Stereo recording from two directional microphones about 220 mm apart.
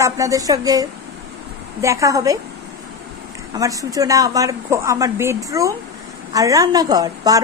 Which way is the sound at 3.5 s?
15° right (ahead or behind).